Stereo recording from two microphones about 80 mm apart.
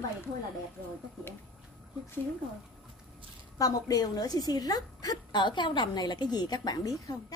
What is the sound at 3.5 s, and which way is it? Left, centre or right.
A woman's voice, left.